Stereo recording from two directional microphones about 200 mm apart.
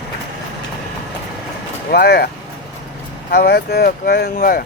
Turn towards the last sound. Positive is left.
turn(degrees=45)  # may be behind; listen again after turning